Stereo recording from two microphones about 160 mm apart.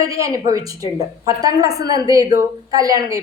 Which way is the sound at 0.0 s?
20° right (ahead or behind).